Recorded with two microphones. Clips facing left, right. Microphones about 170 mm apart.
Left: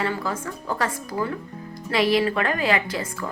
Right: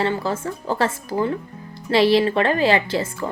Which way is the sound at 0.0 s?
30° right (ahead or behind).